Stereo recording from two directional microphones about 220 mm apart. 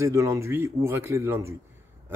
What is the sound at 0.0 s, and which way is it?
Speech, 15° right (ahead or behind).